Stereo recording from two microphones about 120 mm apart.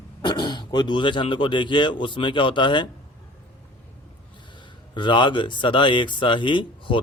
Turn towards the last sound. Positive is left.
turn(degrees=45)  # may be behind; listen again after turning